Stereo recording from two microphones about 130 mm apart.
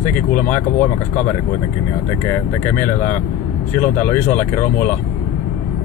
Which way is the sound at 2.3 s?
15° left (ahead or behind).